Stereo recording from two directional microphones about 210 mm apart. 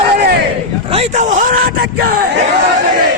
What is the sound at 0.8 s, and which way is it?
Speech, 30° right (ahead or behind).